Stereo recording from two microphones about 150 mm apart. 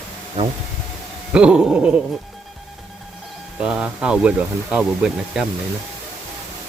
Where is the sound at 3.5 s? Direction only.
5° right (ahead or behind).